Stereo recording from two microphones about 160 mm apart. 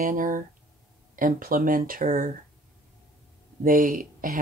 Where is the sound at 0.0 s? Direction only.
60° right (ahead or behind).